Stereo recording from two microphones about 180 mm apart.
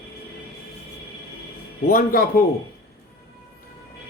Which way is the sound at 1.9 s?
50° left (ahead or behind).